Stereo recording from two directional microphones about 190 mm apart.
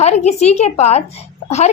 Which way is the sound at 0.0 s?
35° left (ahead or behind).